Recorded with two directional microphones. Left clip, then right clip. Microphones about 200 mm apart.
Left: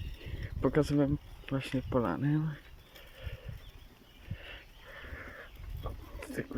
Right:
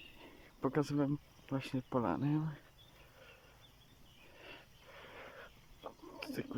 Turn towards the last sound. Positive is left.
turn(degrees=-5)  # may be behind; listen again after turning